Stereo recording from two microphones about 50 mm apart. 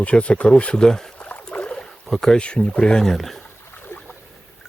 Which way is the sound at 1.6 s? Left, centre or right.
Left.